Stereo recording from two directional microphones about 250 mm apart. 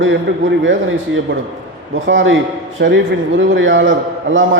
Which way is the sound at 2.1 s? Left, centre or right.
Right.